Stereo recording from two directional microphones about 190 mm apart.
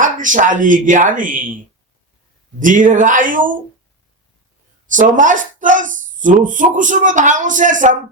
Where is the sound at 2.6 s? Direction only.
45° right (ahead or behind).